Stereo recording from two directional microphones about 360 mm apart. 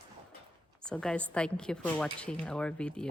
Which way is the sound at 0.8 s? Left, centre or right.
Centre.